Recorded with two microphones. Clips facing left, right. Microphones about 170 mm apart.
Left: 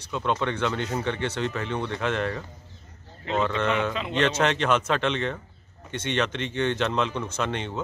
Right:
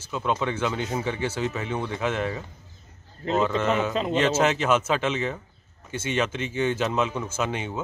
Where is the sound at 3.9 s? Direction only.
40° right (ahead or behind).